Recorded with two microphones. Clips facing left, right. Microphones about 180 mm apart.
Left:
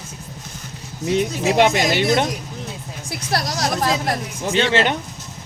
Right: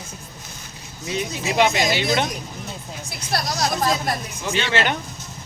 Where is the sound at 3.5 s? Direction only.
90° left.